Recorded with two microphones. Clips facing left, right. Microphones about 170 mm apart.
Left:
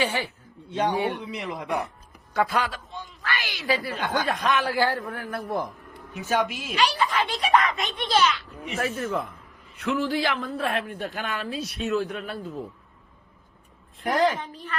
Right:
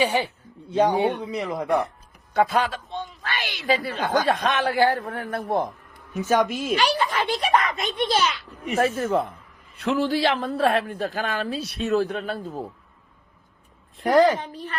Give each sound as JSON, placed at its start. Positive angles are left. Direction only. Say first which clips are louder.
{"t": 0.0, "sound": "speech", "louder": "right 4 dB", "side_deg": -15}
{"t": 1.2, "sound": "speech", "louder": "right 5 dB", "side_deg": -40}
{"t": 2.4, "sound": "a woman's voice", "louder": "right 4 dB", "side_deg": -25}
{"t": 6.1, "sound": "a woman's voice", "louder": "right 4 dB", "side_deg": -45}
{"t": 14.0, "sound": "speech", "louder": "right 5 dB", "side_deg": -40}